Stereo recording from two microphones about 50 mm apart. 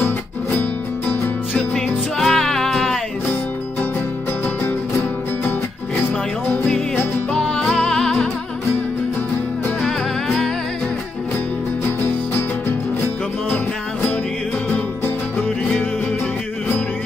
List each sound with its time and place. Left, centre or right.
2.1 s music: centre
7.7 s music: centre
9.8 s music: centre
12.4 s music: left